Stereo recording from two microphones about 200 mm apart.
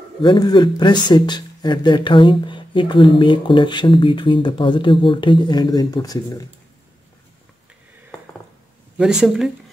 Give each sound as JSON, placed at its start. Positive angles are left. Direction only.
{"t": 0.2, "sound": "speech", "side_deg": 20}
{"t": 8.9, "sound": "speech", "side_deg": -5}